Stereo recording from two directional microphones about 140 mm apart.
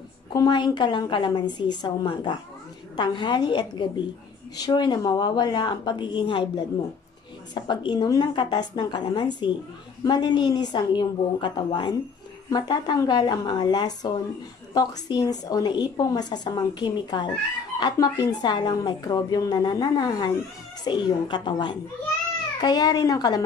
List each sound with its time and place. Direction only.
0.3 s a woman's voice: 30° left (ahead or behind)